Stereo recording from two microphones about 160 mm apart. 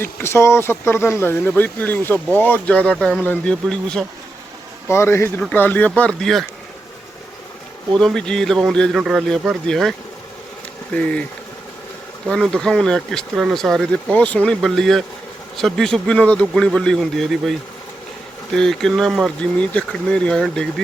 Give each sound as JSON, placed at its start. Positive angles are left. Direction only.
{"t": 0.0, "sound": "speech", "side_deg": 15}
{"t": 4.9, "sound": "speech", "side_deg": 15}
{"t": 7.9, "sound": "speech", "side_deg": 5}
{"t": 10.9, "sound": "speech", "side_deg": 5}
{"t": 12.3, "sound": "speech", "side_deg": 5}
{"t": 18.5, "sound": "speech", "side_deg": 5}